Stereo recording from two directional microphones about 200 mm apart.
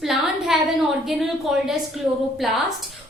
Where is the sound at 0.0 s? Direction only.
Centre (ahead or behind).